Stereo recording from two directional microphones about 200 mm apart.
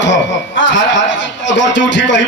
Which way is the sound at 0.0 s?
65° left (ahead or behind).